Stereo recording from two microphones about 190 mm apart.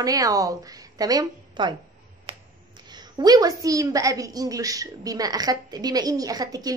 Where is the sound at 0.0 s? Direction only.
20° right (ahead or behind).